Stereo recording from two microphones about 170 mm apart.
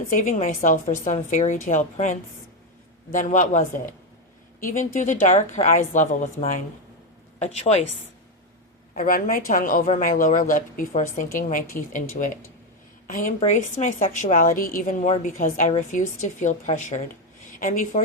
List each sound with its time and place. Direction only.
0.1 s a woman's voice: 45° left (ahead or behind)
9.0 s a woman's voice: 55° left (ahead or behind)
13.4 s a woman's voice: 40° left (ahead or behind)